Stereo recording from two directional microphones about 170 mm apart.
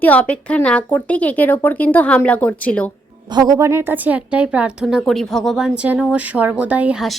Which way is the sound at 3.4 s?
20° right (ahead or behind).